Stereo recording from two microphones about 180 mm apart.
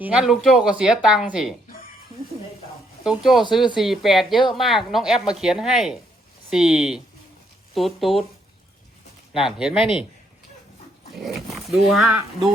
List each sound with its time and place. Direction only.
0.0 s a woman's voice: 5° right (ahead or behind)
3.0 s a woman's voice: 5° right (ahead or behind)
9.3 s a woman's voice: 5° right (ahead or behind)
9.7 s a man's voice: 30° left (ahead or behind)
11.1 s a woman's voice: centre (ahead or behind)